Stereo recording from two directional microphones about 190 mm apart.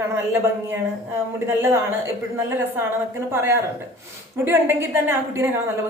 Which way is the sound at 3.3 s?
15° right (ahead or behind).